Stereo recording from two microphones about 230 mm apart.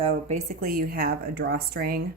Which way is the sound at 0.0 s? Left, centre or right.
Right.